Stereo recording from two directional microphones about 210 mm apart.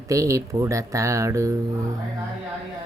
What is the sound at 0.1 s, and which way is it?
Speech, 15° right (ahead or behind).